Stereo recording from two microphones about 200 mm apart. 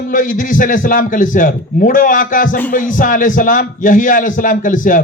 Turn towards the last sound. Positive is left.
turn(degrees=40)  # may be behind; listen again after turning